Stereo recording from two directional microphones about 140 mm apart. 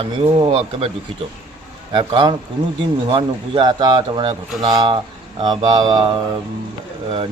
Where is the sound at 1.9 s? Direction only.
35° right (ahead or behind).